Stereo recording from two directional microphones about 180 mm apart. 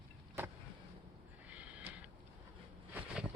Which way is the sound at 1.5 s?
5° right (ahead or behind).